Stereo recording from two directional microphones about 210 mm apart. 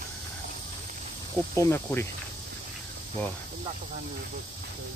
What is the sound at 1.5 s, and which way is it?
Speech, 15° left (ahead or behind).